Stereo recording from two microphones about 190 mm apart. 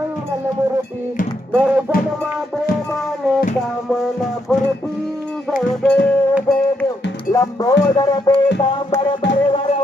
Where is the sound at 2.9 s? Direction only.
Centre (ahead or behind).